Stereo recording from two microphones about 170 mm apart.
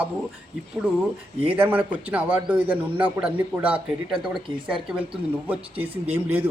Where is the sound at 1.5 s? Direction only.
10° right (ahead or behind).